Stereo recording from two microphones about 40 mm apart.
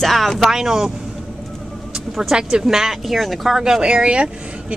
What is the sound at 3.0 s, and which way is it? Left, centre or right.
Speech, centre.